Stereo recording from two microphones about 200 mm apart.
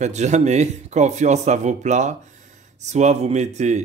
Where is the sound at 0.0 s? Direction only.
35° right (ahead or behind).